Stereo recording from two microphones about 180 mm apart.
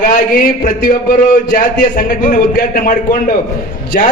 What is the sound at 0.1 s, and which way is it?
A man's voice, 50° left (ahead or behind).